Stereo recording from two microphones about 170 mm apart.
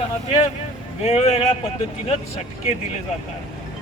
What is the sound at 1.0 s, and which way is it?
Speech, 40° left (ahead or behind).